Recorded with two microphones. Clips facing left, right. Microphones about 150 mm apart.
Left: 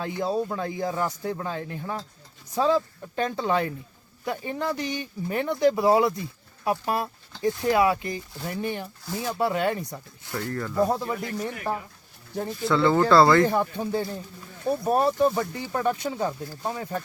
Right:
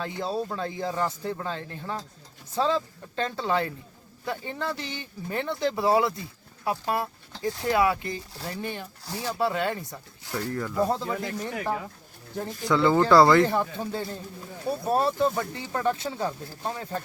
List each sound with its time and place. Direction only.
0.0 s speech: 15° left (ahead or behind)
12.6 s speech: 15° right (ahead or behind)
13.4 s speech: 15° left (ahead or behind)